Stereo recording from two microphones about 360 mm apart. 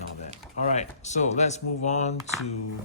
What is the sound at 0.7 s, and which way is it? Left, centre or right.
Speech, centre.